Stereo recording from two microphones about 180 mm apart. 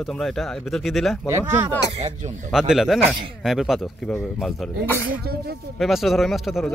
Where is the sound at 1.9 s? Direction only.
35° right (ahead or behind).